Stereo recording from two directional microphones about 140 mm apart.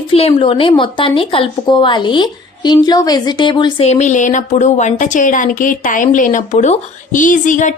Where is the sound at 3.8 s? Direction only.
55° left (ahead or behind).